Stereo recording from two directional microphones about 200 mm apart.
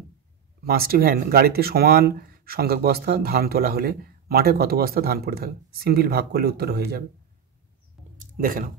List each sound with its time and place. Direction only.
0.7 s speech: 50° right (ahead or behind)
8.2 s speech: 45° right (ahead or behind)